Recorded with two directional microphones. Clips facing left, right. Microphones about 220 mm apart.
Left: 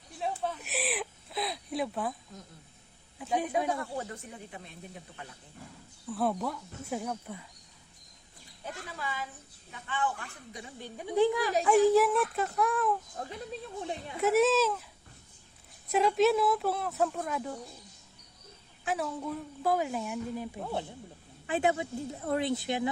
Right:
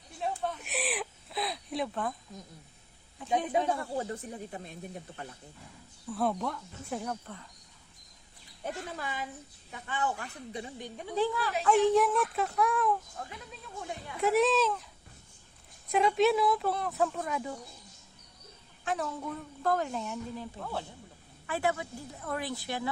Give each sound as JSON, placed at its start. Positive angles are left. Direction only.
{"t": 0.2, "sound": "a sound", "side_deg": 0}
{"t": 3.2, "sound": "speech", "side_deg": -25}
{"t": 6.1, "sound": "speech", "side_deg": 0}
{"t": 8.6, "sound": "a woman's voice", "side_deg": -50}
{"t": 11.0, "sound": "a woman's voice", "side_deg": 15}
{"t": 13.2, "sound": "speech", "side_deg": 35}
{"t": 14.2, "sound": "speech", "side_deg": 0}
{"t": 15.9, "sound": "speech", "side_deg": 0}
{"t": 18.9, "sound": "a woman's voice", "side_deg": 5}